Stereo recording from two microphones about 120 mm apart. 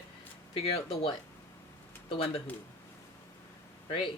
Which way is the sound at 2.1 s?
50° left (ahead or behind).